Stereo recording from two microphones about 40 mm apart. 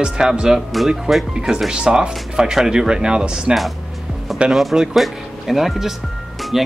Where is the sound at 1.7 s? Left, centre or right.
Centre.